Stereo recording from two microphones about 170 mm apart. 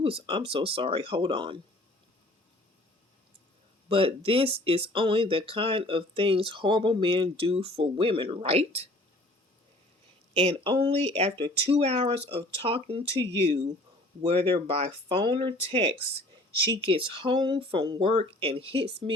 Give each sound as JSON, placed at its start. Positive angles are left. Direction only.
{"t": 0.0, "sound": "speech", "side_deg": -30}
{"t": 3.8, "sound": "speech", "side_deg": -30}
{"t": 10.3, "sound": "speech", "side_deg": -35}